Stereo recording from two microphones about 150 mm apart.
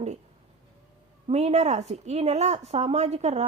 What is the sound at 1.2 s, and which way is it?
A woman's voice, 45° right (ahead or behind).